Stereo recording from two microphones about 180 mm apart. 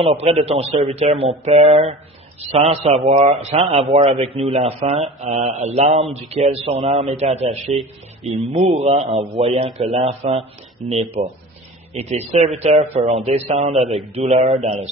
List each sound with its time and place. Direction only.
0.0 s speech: 35° right (ahead or behind)